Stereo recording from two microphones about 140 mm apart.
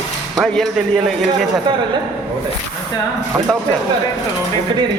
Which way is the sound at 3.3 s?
30° right (ahead or behind).